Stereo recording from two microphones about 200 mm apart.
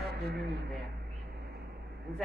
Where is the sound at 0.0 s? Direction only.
55° right (ahead or behind).